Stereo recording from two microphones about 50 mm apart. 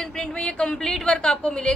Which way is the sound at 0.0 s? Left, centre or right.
Centre.